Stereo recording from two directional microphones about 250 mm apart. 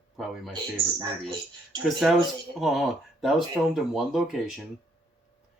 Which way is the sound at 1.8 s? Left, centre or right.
Centre.